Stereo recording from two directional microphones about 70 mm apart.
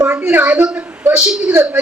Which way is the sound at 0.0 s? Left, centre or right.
Right.